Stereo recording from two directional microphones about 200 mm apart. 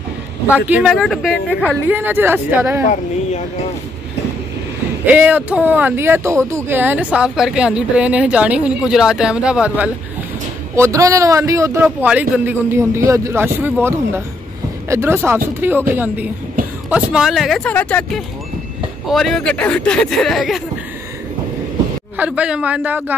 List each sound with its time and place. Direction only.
0.5 s speech: 10° right (ahead or behind)
1.9 s speech: 10° right (ahead or behind)
2.9 s speech: 35° left (ahead or behind)
5.0 s speech: 10° right (ahead or behind)
10.8 s speech: 15° right (ahead or behind); by 20.6 s centre (ahead or behind)
22.1 s speech: 5° right (ahead or behind)